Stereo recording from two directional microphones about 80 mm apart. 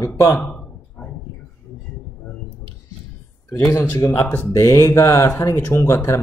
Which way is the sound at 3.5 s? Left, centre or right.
Left.